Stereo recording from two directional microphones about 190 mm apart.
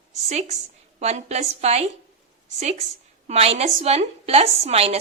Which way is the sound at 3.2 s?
35° right (ahead or behind).